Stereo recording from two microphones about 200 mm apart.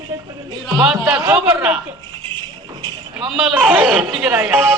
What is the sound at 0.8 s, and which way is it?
Speech, 5° right (ahead or behind).